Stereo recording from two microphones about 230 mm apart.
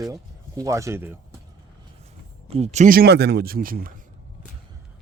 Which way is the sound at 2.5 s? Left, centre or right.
Right.